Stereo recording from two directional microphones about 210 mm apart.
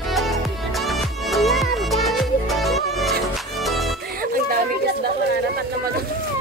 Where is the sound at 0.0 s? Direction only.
Centre (ahead or behind).